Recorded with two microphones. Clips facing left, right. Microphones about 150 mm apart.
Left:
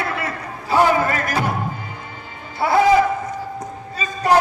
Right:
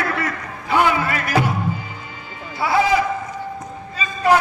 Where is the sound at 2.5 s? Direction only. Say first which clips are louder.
Left 2 dB; 50° left (ahead or behind).